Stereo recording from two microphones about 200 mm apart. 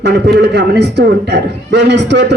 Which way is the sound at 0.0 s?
55° right (ahead or behind).